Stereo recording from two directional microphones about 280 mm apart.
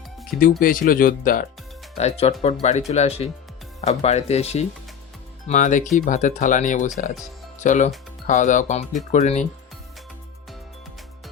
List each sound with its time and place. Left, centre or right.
0.6 s speech: left